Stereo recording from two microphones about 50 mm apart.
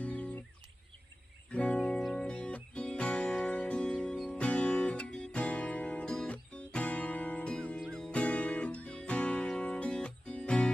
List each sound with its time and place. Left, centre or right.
0.0 s music: left
1.5 s music: left